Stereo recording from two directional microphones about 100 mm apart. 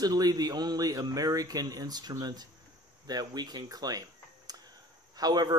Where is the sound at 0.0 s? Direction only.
40° right (ahead or behind).